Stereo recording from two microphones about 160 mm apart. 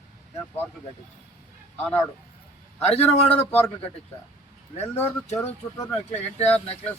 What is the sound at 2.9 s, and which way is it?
Speech, 40° left (ahead or behind).